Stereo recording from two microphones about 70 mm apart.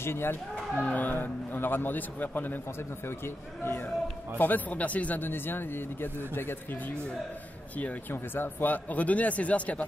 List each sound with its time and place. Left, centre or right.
0.0 s speech: left
0.7 s speech: left
4.4 s speech: left
8.1 s speech: left